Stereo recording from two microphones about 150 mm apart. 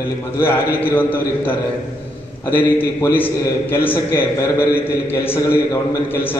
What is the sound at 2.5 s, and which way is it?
A man's voice, 15° left (ahead or behind).